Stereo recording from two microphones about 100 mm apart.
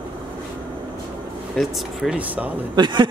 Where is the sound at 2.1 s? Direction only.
15° right (ahead or behind).